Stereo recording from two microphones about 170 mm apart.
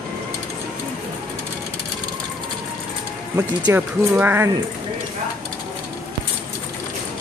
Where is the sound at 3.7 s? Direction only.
15° right (ahead or behind).